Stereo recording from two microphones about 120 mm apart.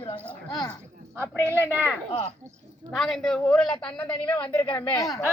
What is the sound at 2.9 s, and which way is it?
A man's voice, centre (ahead or behind).